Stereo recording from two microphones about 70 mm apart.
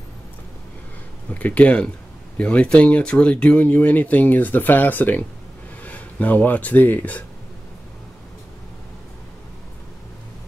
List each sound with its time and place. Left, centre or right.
1.3 s speech: left